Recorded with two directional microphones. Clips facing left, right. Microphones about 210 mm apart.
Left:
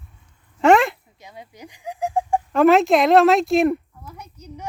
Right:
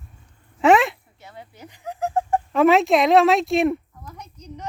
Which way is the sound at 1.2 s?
15° left (ahead or behind).